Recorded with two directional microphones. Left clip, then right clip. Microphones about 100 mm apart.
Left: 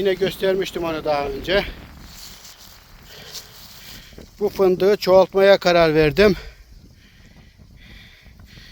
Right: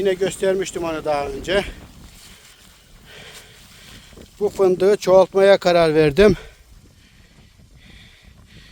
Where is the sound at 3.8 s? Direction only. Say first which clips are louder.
Left 2 dB; 35° right (ahead or behind).